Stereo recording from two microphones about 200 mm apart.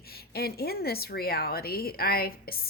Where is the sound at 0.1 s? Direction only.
50° left (ahead or behind).